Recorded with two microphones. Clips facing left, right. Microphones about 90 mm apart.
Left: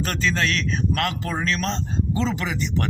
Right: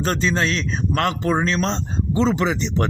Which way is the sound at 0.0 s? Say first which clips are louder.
Right 3 dB; 25° right (ahead or behind).